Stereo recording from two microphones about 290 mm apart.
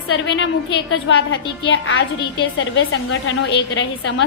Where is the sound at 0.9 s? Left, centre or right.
Left.